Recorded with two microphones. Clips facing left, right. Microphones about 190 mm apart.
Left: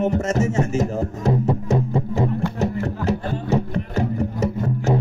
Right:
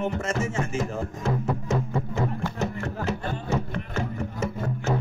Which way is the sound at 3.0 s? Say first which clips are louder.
Left 5 dB; 35° left (ahead or behind).